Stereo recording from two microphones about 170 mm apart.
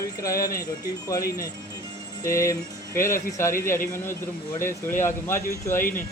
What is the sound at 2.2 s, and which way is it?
Speech, 15° left (ahead or behind).